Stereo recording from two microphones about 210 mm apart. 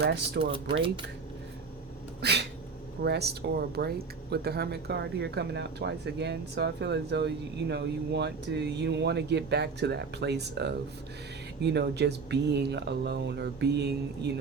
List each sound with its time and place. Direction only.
0.0 s speech: 50° right (ahead or behind)
2.2 s speech: 50° right (ahead or behind)